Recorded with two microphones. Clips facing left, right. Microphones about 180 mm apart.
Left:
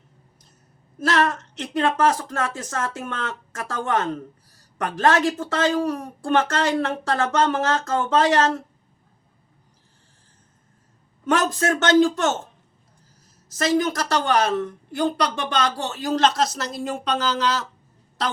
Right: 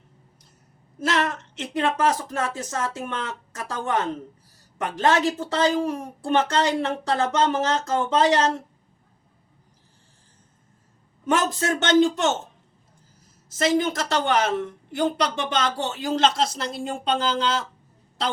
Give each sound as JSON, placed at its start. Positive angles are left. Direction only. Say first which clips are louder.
{"t": 1.0, "sound": "a woman's voice", "louder": "left 3 dB", "side_deg": -20}
{"t": 11.3, "sound": "a woman's voice", "louder": "left 2 dB", "side_deg": -20}
{"t": 13.7, "sound": "a woman's voice", "louder": "left 1 dB", "side_deg": -25}
{"t": 16.0, "sound": "a woman's voice", "louder": "left 2 dB", "side_deg": -25}